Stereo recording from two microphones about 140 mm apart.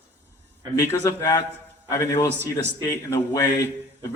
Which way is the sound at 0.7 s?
20° left (ahead or behind).